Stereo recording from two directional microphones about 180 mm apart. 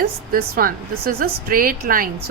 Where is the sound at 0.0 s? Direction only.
55° right (ahead or behind).